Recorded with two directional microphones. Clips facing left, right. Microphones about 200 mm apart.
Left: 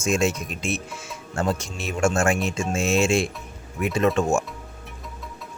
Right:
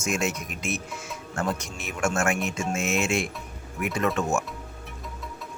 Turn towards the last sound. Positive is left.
turn(degrees=25)  # may be behind; listen again after turning